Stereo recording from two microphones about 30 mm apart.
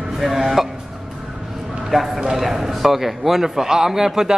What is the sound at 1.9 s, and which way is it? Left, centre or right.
A man's voice, centre.